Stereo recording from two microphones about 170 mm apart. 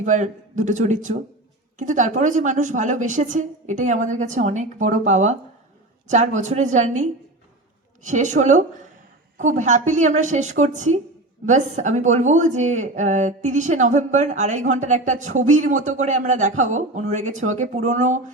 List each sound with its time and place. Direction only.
0.0 s speech: 45° right (ahead or behind)